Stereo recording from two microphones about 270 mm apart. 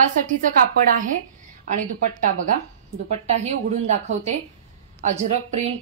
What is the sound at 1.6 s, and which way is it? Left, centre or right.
Speech, right.